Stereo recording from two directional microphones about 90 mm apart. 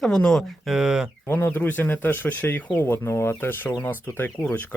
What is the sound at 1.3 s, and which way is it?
Speech, 25° left (ahead or behind).